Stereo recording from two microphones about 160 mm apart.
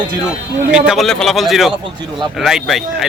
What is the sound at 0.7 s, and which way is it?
A man's voice, centre (ahead or behind).